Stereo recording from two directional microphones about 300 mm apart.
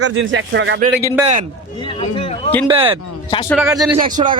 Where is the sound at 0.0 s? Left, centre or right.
Right.